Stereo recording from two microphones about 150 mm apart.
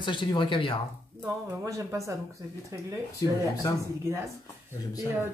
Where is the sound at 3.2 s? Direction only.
25° left (ahead or behind).